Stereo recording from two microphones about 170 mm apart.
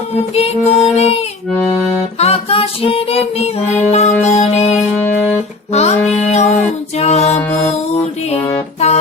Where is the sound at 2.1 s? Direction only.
35° left (ahead or behind).